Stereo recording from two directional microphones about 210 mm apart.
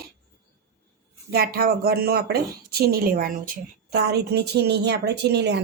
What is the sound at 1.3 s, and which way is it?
Speech, 45° right (ahead or behind).